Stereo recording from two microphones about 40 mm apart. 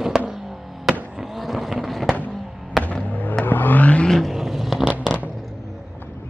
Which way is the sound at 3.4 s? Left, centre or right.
Left.